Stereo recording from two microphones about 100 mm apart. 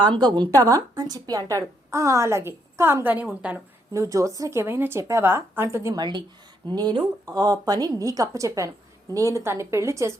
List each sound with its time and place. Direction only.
0.1 s a woman's voice: 45° right (ahead or behind); by 3.6 s 15° right (ahead or behind)
3.9 s a woman's voice: 30° right (ahead or behind)
6.0 s a woman's voice: 50° right (ahead or behind); by 10.2 s 30° right (ahead or behind)